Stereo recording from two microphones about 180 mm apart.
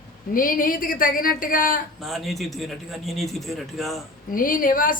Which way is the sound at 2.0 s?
Centre (ahead or behind).